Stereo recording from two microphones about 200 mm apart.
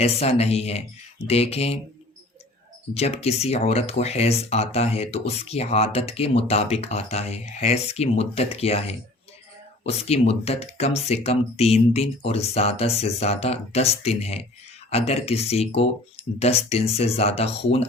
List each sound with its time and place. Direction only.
0.0 s speech: 30° left (ahead or behind)
2.9 s speech: 30° left (ahead or behind)